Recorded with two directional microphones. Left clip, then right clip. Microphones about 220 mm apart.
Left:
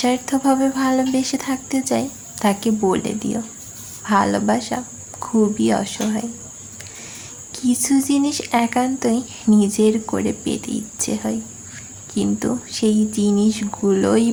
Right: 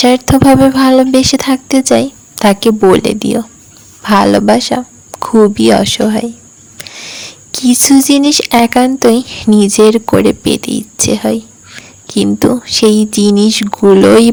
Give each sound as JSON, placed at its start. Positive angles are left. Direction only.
{"t": 0.0, "sound": "speech", "side_deg": -40}